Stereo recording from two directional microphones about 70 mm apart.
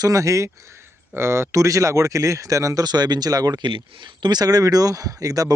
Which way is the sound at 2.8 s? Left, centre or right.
Right.